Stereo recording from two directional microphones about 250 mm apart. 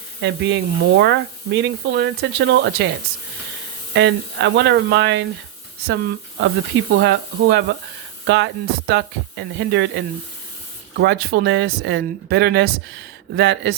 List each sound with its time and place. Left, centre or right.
0.2 s speech: right
3.9 s speech: right
6.4 s speech: right